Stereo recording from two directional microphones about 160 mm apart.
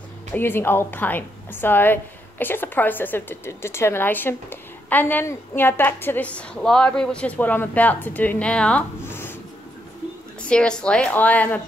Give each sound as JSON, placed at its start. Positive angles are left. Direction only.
{"t": 0.3, "sound": "a woman's voice", "side_deg": 15}
{"t": 10.5, "sound": "a woman's voice", "side_deg": 5}